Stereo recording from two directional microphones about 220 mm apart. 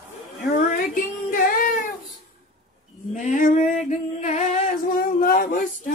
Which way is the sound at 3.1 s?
35° left (ahead or behind).